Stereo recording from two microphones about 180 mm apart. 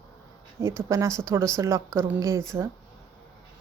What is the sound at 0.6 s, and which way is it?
Speech, 15° right (ahead or behind).